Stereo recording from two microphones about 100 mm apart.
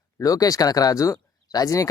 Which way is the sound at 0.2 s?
35° left (ahead or behind).